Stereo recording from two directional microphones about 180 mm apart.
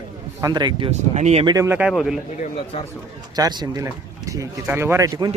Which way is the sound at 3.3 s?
20° right (ahead or behind).